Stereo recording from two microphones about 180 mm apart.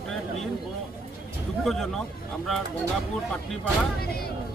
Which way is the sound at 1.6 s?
Centre (ahead or behind).